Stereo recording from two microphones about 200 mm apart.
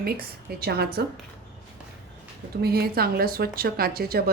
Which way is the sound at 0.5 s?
50° right (ahead or behind).